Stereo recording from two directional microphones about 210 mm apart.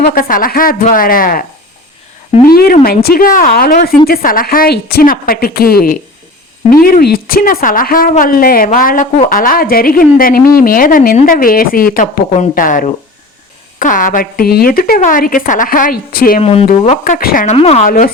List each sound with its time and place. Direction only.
0.0 s speech: 45° left (ahead or behind)
2.5 s speech: 45° left (ahead or behind)
16.4 s speech: 30° left (ahead or behind)